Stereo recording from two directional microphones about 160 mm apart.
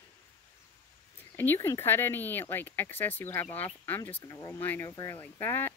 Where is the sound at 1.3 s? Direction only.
15° left (ahead or behind).